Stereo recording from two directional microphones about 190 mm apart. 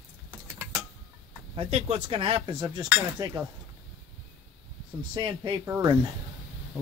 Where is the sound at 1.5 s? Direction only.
30° right (ahead or behind).